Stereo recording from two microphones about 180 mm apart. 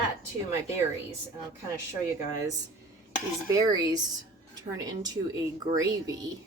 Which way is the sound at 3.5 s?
20° right (ahead or behind).